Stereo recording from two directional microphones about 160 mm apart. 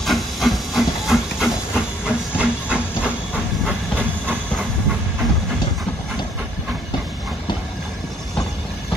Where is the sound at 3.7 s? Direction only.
10° right (ahead or behind).